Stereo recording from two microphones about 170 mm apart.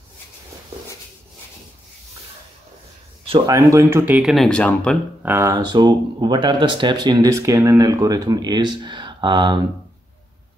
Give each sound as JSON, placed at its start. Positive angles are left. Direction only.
{"t": 3.3, "sound": "speech", "side_deg": -25}
{"t": 5.2, "sound": "speech", "side_deg": -15}